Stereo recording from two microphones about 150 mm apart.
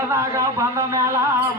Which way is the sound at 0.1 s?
20° right (ahead or behind).